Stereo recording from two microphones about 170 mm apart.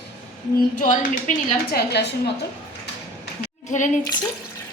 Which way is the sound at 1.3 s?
45° left (ahead or behind).